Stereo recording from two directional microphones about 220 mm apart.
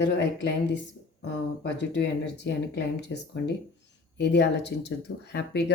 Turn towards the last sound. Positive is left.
turn(degrees=50)  # may be behind; listen again after turning